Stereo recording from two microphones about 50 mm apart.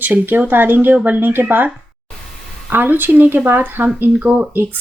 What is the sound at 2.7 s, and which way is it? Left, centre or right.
Speech, right.